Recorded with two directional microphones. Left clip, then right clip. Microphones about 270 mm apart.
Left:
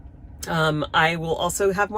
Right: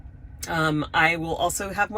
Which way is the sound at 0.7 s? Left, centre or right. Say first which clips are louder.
Left 1 dB; centre.